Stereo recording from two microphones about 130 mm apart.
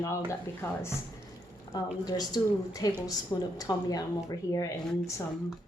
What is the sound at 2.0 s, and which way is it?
A woman's voice, 30° left (ahead or behind).